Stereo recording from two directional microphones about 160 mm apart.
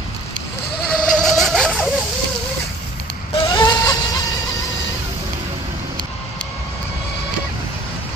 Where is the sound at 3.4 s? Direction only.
25° left (ahead or behind).